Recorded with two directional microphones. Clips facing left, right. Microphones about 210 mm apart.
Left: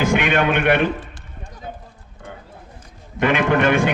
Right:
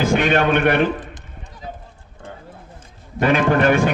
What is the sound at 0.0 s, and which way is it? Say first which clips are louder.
Speech: right 1 dB; 40° right (ahead or behind).